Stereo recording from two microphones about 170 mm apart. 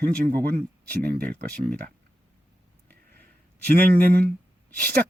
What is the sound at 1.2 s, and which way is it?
Speech, 10° left (ahead or behind).